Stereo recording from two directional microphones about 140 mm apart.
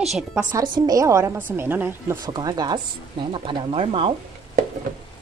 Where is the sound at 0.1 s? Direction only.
5° right (ahead or behind).